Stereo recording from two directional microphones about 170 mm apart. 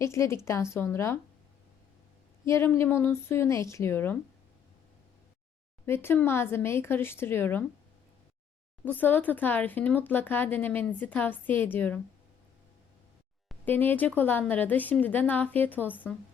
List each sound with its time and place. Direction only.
0.0 s speech: 15° left (ahead or behind)
2.4 s speech: 15° left (ahead or behind)
5.8 s speech: 15° left (ahead or behind)
8.8 s speech: 10° left (ahead or behind)
13.7 s speech: 10° left (ahead or behind)